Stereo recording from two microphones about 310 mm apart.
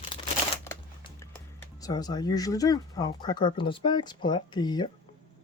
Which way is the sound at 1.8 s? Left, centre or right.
Centre.